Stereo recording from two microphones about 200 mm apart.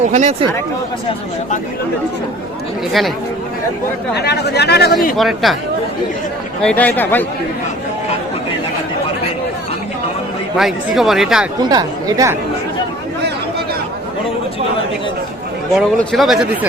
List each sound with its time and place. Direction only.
0.0 s speech: 35° right (ahead or behind)
4.1 s speech: 55° left (ahead or behind)
5.1 s speech: centre (ahead or behind)
6.6 s speech: 5° left (ahead or behind)
10.6 s speech: centre (ahead or behind)
11.6 s speech: 20° right (ahead or behind)
15.7 s speech: centre (ahead or behind)